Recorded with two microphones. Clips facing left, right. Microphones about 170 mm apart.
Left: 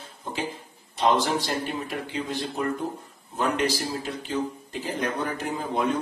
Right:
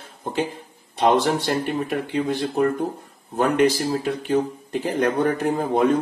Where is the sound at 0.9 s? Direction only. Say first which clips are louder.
Right 4 dB; 60° right (ahead or behind).